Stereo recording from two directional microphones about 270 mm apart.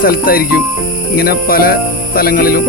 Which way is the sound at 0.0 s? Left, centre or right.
Left.